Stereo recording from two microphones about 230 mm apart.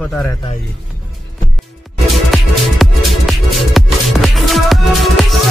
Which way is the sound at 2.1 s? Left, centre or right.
Centre.